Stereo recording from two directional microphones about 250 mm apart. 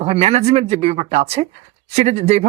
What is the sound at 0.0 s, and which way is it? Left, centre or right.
Speech, right.